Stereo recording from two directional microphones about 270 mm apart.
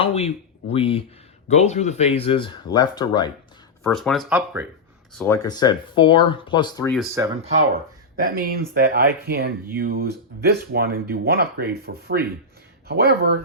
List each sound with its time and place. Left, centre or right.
0.0 s speech: left
3.8 s speech: centre
5.1 s speech: centre
7.4 s speech: right